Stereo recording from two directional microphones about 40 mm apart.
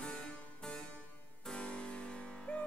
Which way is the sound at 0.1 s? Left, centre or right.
Left.